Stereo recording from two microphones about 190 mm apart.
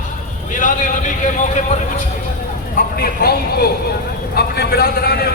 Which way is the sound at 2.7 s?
55° left (ahead or behind).